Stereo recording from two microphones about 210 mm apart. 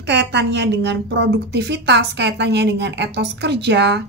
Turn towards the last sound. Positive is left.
turn(degrees=-55)  # may be behind; listen again after turning